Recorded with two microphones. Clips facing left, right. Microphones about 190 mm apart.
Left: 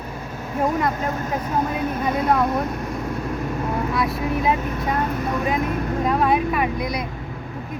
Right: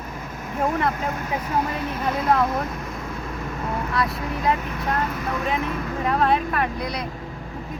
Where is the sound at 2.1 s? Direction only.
Centre (ahead or behind).